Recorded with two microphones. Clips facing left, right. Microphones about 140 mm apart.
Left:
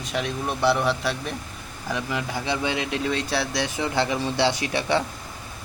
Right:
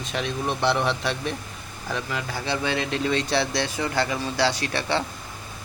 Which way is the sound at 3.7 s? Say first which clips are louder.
Left 4 dB; 20° left (ahead or behind).